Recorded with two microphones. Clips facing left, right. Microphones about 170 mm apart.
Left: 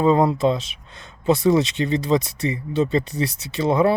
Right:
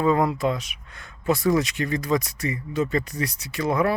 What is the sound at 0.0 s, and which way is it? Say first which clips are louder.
Speech: left 4 dB; 25° left (ahead or behind).